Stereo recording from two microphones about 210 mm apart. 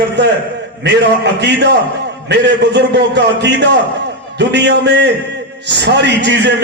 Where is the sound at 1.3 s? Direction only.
55° right (ahead or behind).